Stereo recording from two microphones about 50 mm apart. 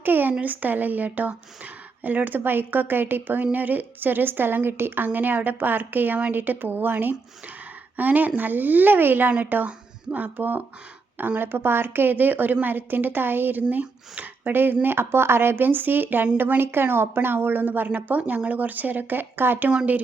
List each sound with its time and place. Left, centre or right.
0.0 s speech: right
9.6 s speech: right